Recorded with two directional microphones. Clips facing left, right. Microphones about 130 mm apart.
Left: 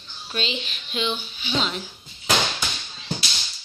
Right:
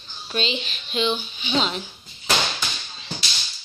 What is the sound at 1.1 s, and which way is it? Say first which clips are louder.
Speech: right 3 dB; 15° right (ahead or behind).